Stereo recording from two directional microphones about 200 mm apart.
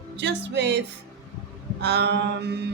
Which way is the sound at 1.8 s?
55° right (ahead or behind).